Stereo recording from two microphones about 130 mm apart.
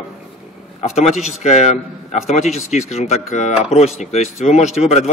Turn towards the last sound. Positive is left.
turn(degrees=60)  # may be behind; listen again after turning